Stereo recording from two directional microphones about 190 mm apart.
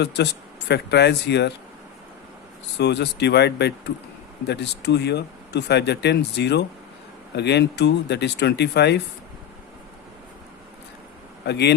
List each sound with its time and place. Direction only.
0.0 s speech: 60° left (ahead or behind)
2.7 s speech: 65° left (ahead or behind)
11.4 s speech: 60° left (ahead or behind)